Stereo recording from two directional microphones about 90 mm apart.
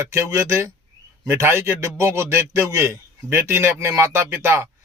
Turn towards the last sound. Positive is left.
turn(degrees=-25)  # may be behind; listen again after turning